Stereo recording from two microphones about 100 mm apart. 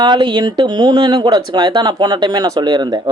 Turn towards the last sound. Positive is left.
turn(degrees=-45)  # may be behind; listen again after turning